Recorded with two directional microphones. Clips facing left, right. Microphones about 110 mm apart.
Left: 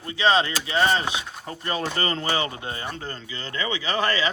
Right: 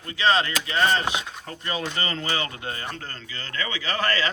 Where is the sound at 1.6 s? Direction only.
40° left (ahead or behind).